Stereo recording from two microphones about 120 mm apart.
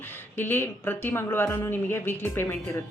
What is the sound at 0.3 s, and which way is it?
A woman's voice, 15° left (ahead or behind).